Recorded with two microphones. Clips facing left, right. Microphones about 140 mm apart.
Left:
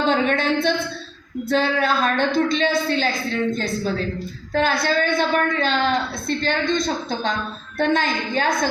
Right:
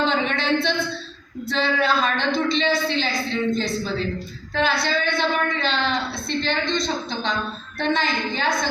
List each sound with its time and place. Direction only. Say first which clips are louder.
0.0 s a woman's voice: left 3 dB; 50° left (ahead or behind)